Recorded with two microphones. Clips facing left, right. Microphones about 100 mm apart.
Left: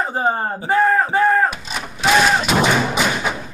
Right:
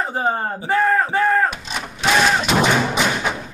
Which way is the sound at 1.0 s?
20° left (ahead or behind).